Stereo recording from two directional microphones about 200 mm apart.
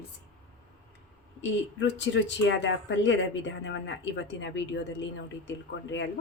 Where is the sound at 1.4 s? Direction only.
65° left (ahead or behind).